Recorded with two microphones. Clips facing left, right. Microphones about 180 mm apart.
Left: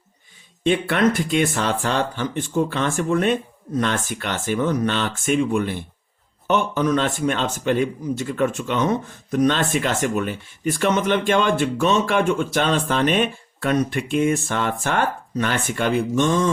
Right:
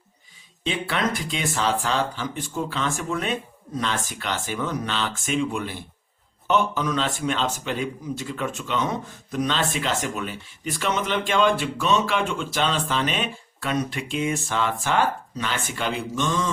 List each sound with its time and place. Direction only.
0.6 s speech: 55° left (ahead or behind)